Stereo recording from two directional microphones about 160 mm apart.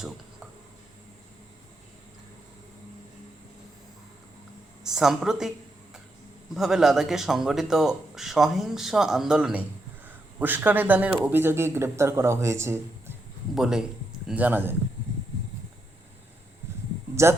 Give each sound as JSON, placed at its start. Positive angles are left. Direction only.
{"t": 4.8, "sound": "a man's voice", "side_deg": -5}
{"t": 6.5, "sound": "a man's voice", "side_deg": -5}
{"t": 13.6, "sound": "a man's voice", "side_deg": -5}
{"t": 17.2, "sound": "speech", "side_deg": -20}